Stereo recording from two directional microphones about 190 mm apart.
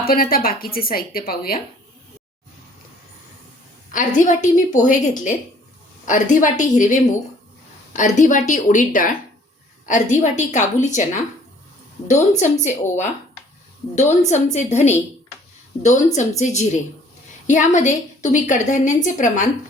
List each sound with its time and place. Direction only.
0.0 s a woman's voice: 50° left (ahead or behind)
3.9 s a woman's voice: 45° left (ahead or behind)
14.1 s a woman's voice: 35° left (ahead or behind)